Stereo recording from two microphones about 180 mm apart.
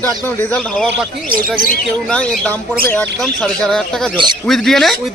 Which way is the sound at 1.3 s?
50° right (ahead or behind).